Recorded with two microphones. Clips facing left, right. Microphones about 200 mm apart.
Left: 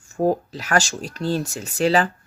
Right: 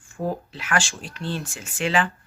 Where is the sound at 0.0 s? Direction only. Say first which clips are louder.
Left 8 dB; 40° left (ahead or behind).